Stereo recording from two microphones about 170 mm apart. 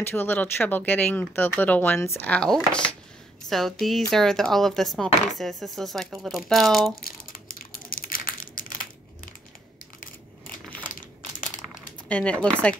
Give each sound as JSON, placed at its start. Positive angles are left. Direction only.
{"t": 0.0, "sound": "speech", "side_deg": 10}
{"t": 7.0, "sound": "crumpling", "side_deg": 60}
{"t": 9.9, "sound": "a sound", "side_deg": 55}
{"t": 12.1, "sound": "speech", "side_deg": 5}